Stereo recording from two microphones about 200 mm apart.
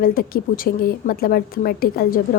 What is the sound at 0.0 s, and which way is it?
A woman's voice, 45° left (ahead or behind).